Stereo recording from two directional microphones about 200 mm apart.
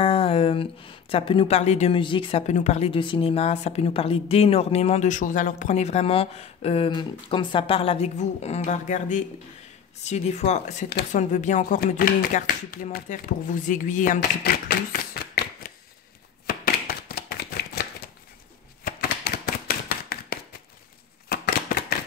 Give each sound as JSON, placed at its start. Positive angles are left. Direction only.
{"t": 0.0, "sound": "speech", "side_deg": 30}
{"t": 16.4, "sound": "chopping", "side_deg": 50}
{"t": 18.9, "sound": "shuffling cards", "side_deg": 50}
{"t": 21.3, "sound": "a sound", "side_deg": 50}